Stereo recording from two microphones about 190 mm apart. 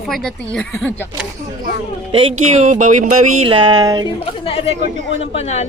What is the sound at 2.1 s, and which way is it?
Speech, 35° right (ahead or behind).